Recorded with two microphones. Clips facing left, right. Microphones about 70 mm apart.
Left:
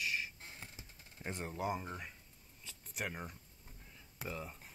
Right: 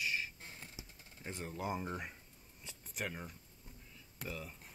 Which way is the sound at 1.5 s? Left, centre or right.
Centre.